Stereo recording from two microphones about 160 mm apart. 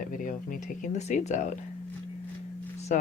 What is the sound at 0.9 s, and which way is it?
Speech, 45° left (ahead or behind).